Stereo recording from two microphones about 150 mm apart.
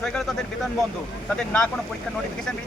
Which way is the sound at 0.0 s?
5° left (ahead or behind).